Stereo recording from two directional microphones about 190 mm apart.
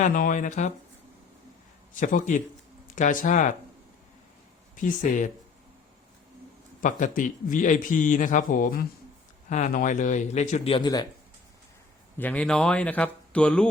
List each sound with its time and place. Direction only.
0.0 s speech: 45° left (ahead or behind)
2.0 s speech: 40° left (ahead or behind)
4.8 s a man's voice: 45° left (ahead or behind)
6.8 s a man's voice: 45° left (ahead or behind); by 11.0 s 25° left (ahead or behind)
12.1 s speech: 10° left (ahead or behind)